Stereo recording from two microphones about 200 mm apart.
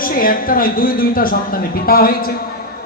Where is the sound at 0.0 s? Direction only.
45° left (ahead or behind).